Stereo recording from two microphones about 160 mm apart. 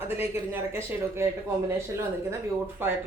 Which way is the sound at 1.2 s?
15° right (ahead or behind).